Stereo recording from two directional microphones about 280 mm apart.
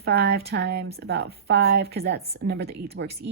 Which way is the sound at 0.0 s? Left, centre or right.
Right.